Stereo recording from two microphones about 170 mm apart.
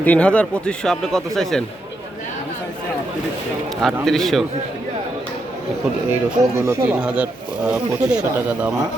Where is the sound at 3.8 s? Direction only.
Centre (ahead or behind).